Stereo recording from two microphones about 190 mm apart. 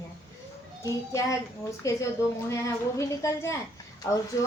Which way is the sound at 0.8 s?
15° left (ahead or behind).